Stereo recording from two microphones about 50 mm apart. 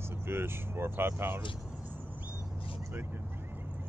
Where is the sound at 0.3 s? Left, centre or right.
Right.